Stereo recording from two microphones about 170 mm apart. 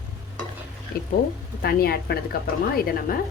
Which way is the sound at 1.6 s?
65° left (ahead or behind).